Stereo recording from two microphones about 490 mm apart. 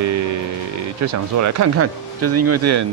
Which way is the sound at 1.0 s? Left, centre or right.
Right.